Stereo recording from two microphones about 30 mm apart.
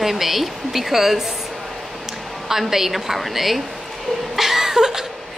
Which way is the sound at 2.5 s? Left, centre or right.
Centre.